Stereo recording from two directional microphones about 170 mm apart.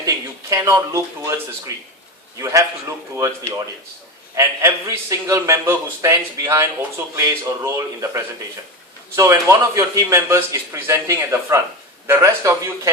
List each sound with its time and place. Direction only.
0.5 s a man's voice: 20° right (ahead or behind)
4.4 s a man's voice: 20° right (ahead or behind)